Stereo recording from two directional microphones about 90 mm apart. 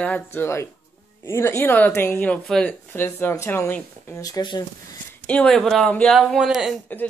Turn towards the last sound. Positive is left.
turn(degrees=20)  # may be behind; listen again after turning